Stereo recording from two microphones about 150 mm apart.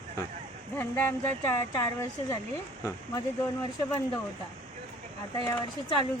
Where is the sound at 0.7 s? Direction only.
10° left (ahead or behind).